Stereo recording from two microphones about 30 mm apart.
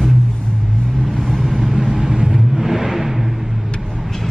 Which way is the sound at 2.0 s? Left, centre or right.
Right.